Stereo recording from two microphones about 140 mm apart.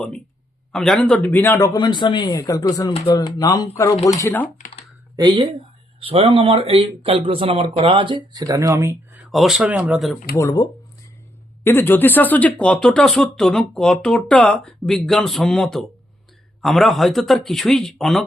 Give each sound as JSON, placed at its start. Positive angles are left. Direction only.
{"t": 0.7, "sound": "speech", "side_deg": 5}
{"t": 4.2, "sound": "speech", "side_deg": 15}
{"t": 6.0, "sound": "speech", "side_deg": -40}
{"t": 9.3, "sound": "speech", "side_deg": 0}
{"t": 10.3, "sound": "speech", "side_deg": 25}